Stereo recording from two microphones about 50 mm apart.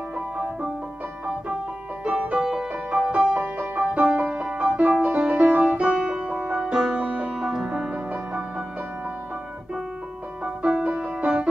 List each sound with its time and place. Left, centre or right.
2.0 s music: right
5.9 s music: centre
7.0 s music: right
10.4 s music: right